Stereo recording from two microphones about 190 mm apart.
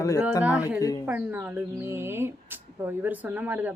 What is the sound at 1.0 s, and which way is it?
Speech, 10° right (ahead or behind).